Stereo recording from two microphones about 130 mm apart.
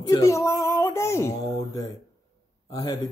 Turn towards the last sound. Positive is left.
turn(degrees=30)  # may be behind; listen again after turning